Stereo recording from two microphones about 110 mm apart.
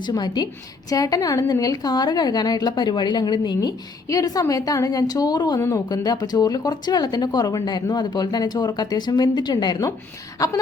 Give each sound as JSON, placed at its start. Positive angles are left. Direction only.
{"t": 0.0, "sound": "a woman's voice", "side_deg": 40}